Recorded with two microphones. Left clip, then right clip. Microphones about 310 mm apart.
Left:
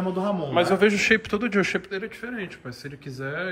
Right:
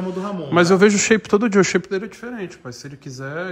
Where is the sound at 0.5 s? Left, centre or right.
Right.